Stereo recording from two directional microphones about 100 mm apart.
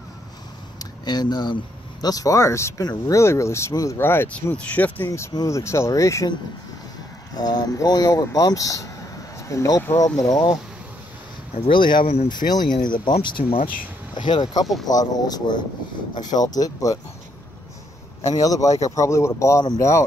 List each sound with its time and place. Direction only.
0.7 s speech: 45° left (ahead or behind); by 5.3 s 25° left (ahead or behind)
5.3 s speech: 35° left (ahead or behind)
7.3 s speech: 40° left (ahead or behind)
11.7 s speech: 50° left (ahead or behind)
14.2 s speech: 50° left (ahead or behind)
18.3 s speech: 35° left (ahead or behind)